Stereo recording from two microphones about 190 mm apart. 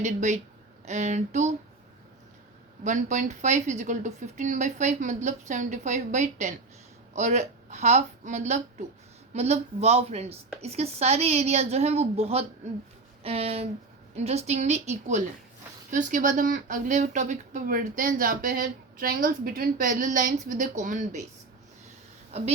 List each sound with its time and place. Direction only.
0.0 s a woman's voice: 40° right (ahead or behind)
2.8 s a woman's voice: 40° right (ahead or behind)
22.3 s a woman's voice: 35° right (ahead or behind)